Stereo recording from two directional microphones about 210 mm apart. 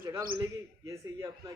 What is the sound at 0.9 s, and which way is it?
Speech, 15° right (ahead or behind).